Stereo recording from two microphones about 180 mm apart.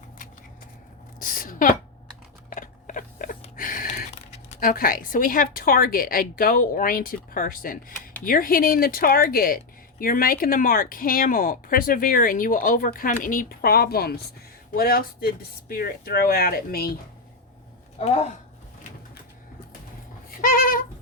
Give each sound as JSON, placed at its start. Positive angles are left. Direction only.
{"t": 1.2, "sound": "a sound", "side_deg": 50}
{"t": 7.3, "sound": "speech", "side_deg": 50}
{"t": 18.0, "sound": "speech", "side_deg": 35}
{"t": 20.3, "sound": "goat", "side_deg": 50}